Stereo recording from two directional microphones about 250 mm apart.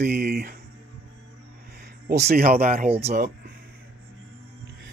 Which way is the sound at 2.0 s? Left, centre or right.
Right.